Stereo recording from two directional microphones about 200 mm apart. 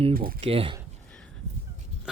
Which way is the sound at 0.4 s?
30° right (ahead or behind).